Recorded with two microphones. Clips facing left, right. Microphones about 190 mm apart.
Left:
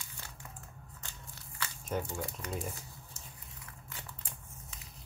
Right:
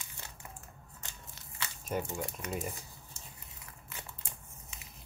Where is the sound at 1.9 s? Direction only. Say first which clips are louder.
Right 1 dB; 20° right (ahead or behind).